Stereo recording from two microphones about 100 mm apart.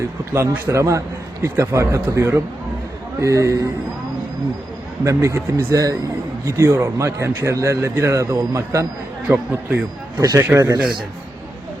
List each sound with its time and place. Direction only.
0.3 s a man's voice: 25° right (ahead or behind)
5.0 s a man's voice: 25° right (ahead or behind)
9.5 s a man's voice: 15° right (ahead or behind)
10.2 s a man's voice: 35° right (ahead or behind)